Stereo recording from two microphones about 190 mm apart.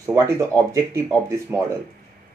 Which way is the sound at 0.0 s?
15° right (ahead or behind).